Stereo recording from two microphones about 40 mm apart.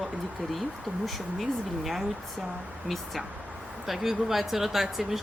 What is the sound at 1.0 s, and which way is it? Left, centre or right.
Speech, centre.